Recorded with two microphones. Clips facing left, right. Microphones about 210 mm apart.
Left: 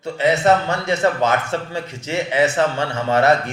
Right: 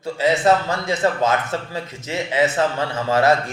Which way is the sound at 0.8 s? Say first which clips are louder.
Left 1 dB; 25° left (ahead or behind).